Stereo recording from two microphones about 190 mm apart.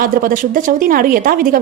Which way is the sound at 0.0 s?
45° right (ahead or behind).